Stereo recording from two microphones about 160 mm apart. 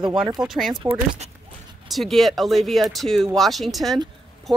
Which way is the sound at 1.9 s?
Centre (ahead or behind).